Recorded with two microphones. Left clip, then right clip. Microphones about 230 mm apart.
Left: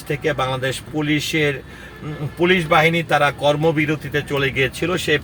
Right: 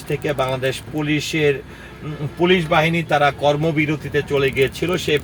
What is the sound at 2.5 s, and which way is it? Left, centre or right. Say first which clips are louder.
A man's voice: left 2 dB; left.